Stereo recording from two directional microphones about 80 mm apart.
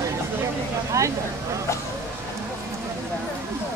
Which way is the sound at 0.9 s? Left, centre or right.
Right.